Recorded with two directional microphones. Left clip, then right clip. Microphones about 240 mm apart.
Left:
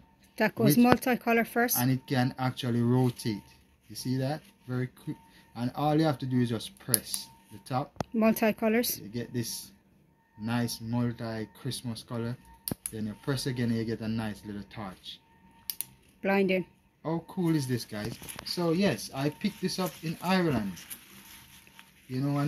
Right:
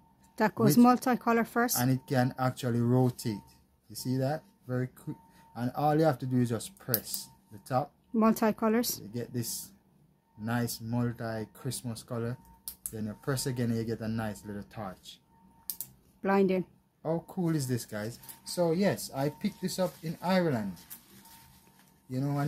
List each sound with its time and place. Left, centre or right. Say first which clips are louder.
0.4 s speech: even; centre
1.8 s speech: even; right
8.1 s speech: left 1 dB; centre
9.1 s speech: left 2 dB; right
16.2 s speech: even; centre
17.0 s speech: even; right
22.1 s speech: left 2 dB; right